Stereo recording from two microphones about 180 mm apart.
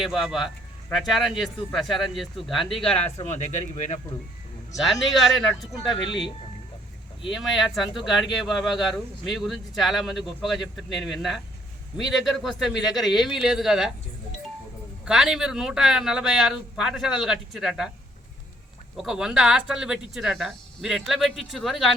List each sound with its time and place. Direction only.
0.0 s speech: centre (ahead or behind)
3.2 s speech: 40° left (ahead or behind)
4.8 s speech: centre (ahead or behind)
6.0 s speech: 25° left (ahead or behind)
7.3 s speech: centre (ahead or behind)
15.0 s speech: 5° right (ahead or behind)
18.9 s speech: 5° right (ahead or behind)